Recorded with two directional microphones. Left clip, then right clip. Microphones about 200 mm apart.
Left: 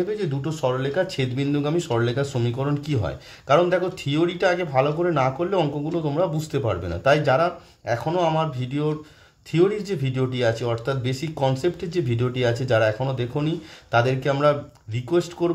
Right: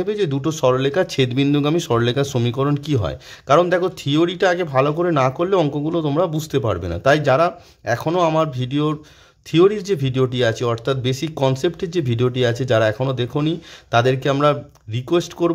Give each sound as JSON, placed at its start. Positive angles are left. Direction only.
{"t": 0.0, "sound": "speech", "side_deg": -50}